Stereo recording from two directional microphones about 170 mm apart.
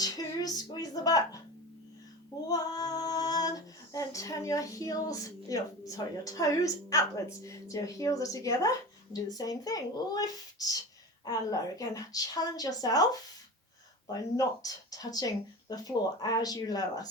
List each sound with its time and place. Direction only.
0.0 s female singing: 20° left (ahead or behind)
2.5 s female singing: 20° left (ahead or behind)
14.1 s female singing: 20° left (ahead or behind)